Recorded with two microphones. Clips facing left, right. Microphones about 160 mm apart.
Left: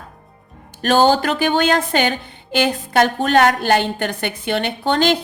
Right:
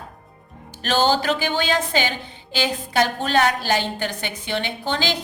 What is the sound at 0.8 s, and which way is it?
A woman's voice, 50° left (ahead or behind).